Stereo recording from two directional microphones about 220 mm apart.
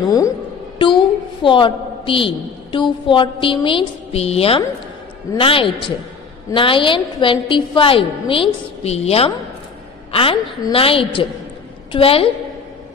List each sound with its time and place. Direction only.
0.7 s a woman's voice: 20° left (ahead or behind)